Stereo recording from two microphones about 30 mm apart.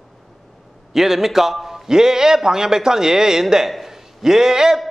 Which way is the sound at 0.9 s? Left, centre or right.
Centre.